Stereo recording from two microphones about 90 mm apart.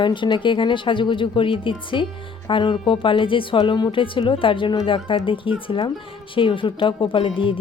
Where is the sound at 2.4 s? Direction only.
60° left (ahead or behind).